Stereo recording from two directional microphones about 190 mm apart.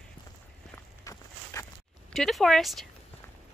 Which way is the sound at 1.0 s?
15° left (ahead or behind).